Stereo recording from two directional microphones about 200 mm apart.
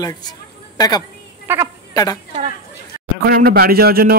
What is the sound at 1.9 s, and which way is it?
Speech, 20° left (ahead or behind).